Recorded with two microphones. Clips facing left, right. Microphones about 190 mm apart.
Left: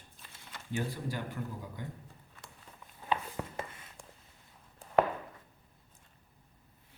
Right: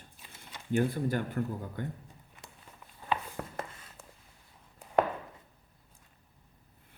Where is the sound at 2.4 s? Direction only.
20° right (ahead or behind).